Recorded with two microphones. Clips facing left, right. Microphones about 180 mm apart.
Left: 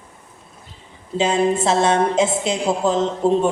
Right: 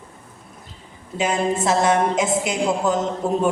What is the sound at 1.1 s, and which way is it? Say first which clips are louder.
A woman's voice: left 3 dB; 25° left (ahead or behind).